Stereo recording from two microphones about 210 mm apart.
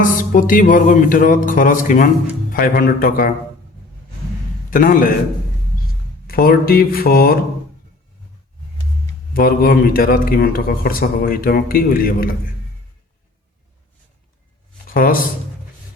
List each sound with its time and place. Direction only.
0.2 s a man's voice: 40° left (ahead or behind)
4.7 s speech: 40° left (ahead or behind)
6.2 s a man's voice: 45° left (ahead or behind)
9.3 s a man's voice: 45° left (ahead or behind)
14.9 s a man's voice: 45° left (ahead or behind)